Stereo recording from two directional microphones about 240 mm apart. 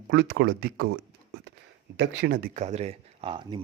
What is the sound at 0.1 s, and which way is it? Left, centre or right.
Speech, right.